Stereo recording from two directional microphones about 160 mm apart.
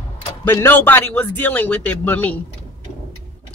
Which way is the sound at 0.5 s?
15° left (ahead or behind).